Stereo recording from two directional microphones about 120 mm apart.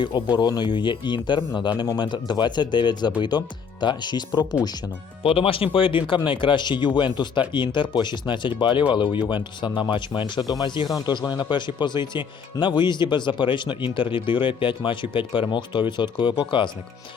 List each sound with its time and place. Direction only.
0.3 s speech: 35° left (ahead or behind)
5.2 s speech: 50° left (ahead or behind)